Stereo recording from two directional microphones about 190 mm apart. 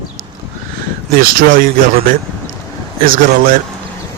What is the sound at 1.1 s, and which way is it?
Speech, 50° right (ahead or behind).